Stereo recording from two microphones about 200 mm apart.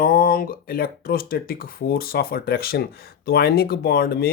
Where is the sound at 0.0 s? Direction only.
45° left (ahead or behind).